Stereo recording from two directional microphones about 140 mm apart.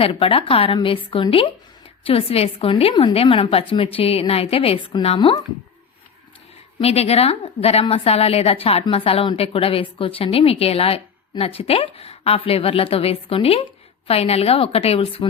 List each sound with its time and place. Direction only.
0.0 s a woman's voice: 40° left (ahead or behind)
6.8 s a woman's voice: 45° left (ahead or behind)